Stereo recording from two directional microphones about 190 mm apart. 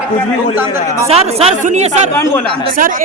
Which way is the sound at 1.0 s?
30° right (ahead or behind).